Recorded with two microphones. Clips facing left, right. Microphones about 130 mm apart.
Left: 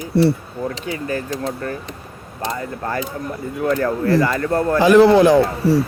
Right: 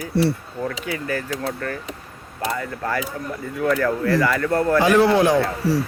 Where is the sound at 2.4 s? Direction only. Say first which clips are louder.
Left 1 dB; 30° left (ahead or behind).